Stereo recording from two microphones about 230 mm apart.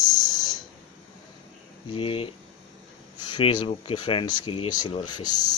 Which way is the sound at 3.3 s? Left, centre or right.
Centre.